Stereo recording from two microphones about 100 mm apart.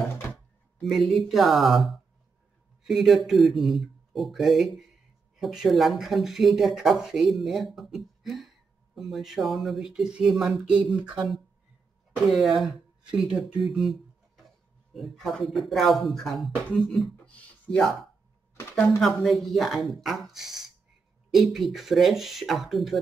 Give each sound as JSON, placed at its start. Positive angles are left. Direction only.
{"t": 0.8, "sound": "speech", "side_deg": 0}
{"t": 2.9, "sound": "speech", "side_deg": 0}
{"t": 17.3, "sound": "music", "side_deg": 5}
{"t": 18.9, "sound": "speech", "side_deg": 0}